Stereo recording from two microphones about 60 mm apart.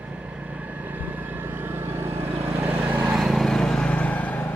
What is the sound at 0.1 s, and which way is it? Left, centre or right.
Vehicle, centre.